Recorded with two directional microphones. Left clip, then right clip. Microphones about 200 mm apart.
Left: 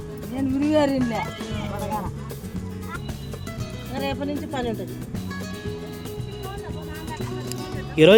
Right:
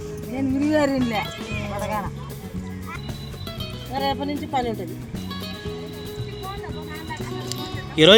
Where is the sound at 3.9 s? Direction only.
40° right (ahead or behind).